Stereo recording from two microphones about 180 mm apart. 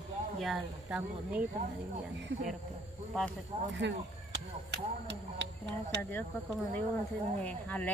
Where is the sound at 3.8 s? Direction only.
70° right (ahead or behind).